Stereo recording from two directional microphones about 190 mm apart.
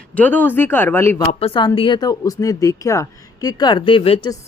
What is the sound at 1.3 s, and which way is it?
Speech, 30° left (ahead or behind).